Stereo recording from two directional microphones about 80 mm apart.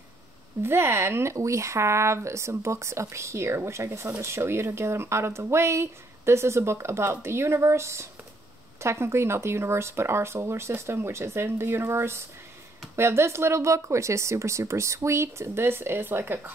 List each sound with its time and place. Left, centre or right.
0.6 s speech: right